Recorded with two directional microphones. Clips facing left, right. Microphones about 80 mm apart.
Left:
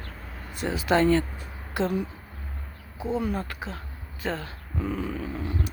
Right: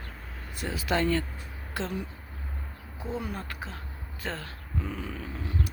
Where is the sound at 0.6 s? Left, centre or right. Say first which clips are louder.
Left 6 dB; left.